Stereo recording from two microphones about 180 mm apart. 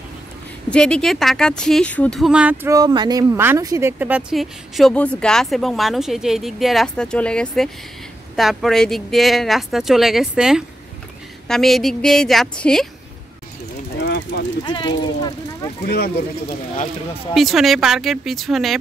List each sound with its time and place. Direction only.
0.7 s speech: 5° left (ahead or behind)
13.9 s a sound: 60° left (ahead or behind)
14.6 s speech: 25° left (ahead or behind)
15.8 s speech: 60° left (ahead or behind)
17.3 s speech: centre (ahead or behind)